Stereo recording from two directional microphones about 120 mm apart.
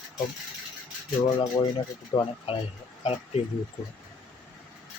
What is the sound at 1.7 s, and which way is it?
Speech, 50° left (ahead or behind).